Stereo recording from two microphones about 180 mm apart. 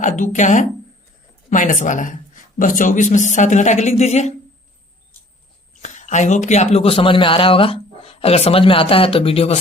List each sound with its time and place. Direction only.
0.0 s speech: 45° left (ahead or behind)
5.8 s speech: 40° left (ahead or behind)